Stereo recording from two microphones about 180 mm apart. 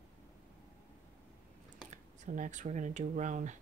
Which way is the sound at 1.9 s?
45° right (ahead or behind).